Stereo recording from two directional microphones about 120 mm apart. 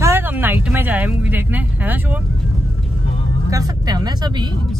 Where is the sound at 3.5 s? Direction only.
30° right (ahead or behind).